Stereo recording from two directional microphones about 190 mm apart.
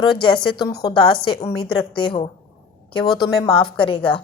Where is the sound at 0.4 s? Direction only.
25° left (ahead or behind).